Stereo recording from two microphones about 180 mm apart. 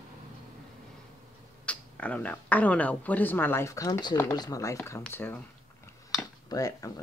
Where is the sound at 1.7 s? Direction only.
5° left (ahead or behind).